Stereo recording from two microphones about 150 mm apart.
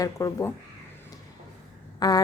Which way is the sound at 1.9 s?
25° left (ahead or behind).